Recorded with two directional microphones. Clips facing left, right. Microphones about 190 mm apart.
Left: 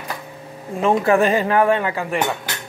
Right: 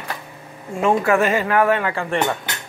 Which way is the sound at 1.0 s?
35° left (ahead or behind).